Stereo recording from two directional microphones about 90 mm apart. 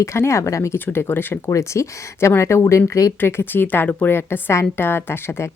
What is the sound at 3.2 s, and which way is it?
A woman's voice, 25° left (ahead or behind).